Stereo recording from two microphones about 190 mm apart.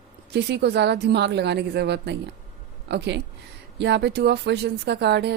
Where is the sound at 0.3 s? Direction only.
60° right (ahead or behind).